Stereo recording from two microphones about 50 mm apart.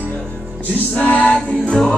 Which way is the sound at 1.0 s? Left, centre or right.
Left.